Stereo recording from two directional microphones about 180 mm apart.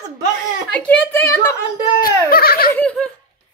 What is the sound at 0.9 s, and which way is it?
Speech, 10° left (ahead or behind).